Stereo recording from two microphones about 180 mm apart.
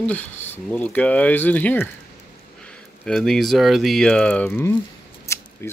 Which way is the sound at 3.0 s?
5° left (ahead or behind).